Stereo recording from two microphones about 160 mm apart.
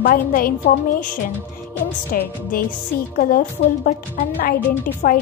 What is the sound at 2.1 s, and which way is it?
A woman's voice, 65° left (ahead or behind).